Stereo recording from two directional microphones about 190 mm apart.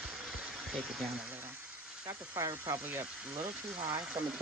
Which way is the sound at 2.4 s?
15° right (ahead or behind).